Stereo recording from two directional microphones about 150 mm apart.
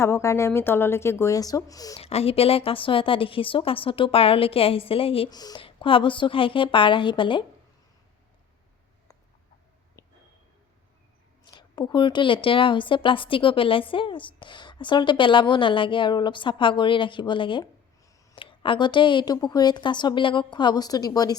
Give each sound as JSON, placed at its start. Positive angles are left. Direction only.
{"t": 0.0, "sound": "a woman's voice", "side_deg": 15}
{"t": 2.0, "sound": "a woman's voice", "side_deg": 40}
{"t": 5.3, "sound": "a woman's voice", "side_deg": 25}
{"t": 11.4, "sound": "a woman's voice", "side_deg": 30}